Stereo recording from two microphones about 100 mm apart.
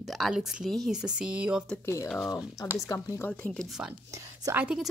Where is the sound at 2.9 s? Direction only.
35° left (ahead or behind).